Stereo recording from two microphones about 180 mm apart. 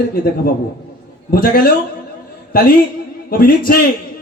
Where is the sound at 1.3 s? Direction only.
55° left (ahead or behind).